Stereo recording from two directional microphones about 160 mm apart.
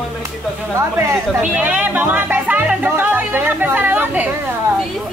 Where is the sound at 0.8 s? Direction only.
15° right (ahead or behind).